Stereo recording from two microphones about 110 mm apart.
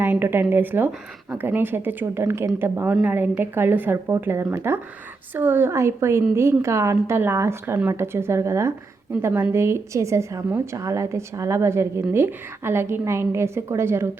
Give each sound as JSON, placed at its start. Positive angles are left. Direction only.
{"t": 0.0, "sound": "a woman's voice", "side_deg": -20}